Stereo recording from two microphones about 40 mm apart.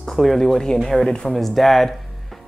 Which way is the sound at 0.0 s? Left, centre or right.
Centre.